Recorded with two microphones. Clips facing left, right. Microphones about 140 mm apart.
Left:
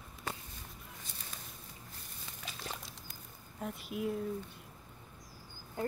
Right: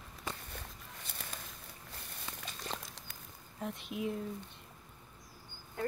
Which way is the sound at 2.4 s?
Centre (ahead or behind).